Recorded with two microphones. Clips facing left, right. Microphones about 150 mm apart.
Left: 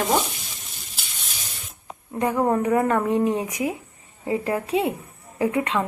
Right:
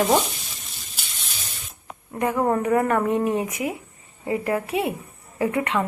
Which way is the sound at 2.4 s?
10° left (ahead or behind).